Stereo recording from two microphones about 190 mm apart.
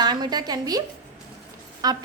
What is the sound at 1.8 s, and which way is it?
Speech, 20° right (ahead or behind).